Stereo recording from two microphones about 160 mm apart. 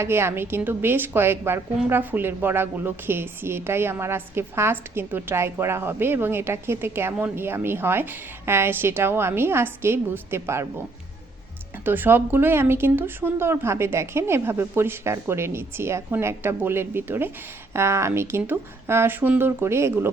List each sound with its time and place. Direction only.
0.0 s speech: 15° right (ahead or behind)
11.9 s speech: 15° right (ahead or behind)